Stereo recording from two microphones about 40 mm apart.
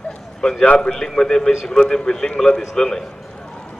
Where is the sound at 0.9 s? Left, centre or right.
Centre.